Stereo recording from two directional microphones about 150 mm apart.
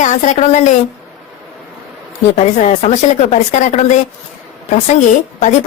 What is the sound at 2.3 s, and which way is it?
A woman's voice, 55° left (ahead or behind).